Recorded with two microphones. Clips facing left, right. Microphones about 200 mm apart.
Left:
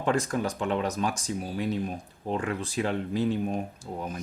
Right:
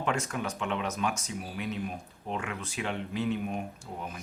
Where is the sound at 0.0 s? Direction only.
35° left (ahead or behind).